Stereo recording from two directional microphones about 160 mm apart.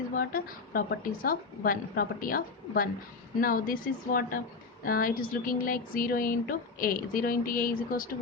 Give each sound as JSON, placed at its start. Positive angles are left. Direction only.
{"t": 0.1, "sound": "speech", "side_deg": 65}